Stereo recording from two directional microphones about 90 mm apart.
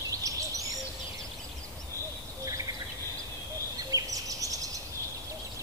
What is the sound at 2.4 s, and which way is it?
Insect, 40° right (ahead or behind).